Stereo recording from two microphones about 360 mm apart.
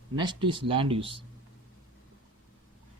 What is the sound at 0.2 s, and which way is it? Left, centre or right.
Speech, centre.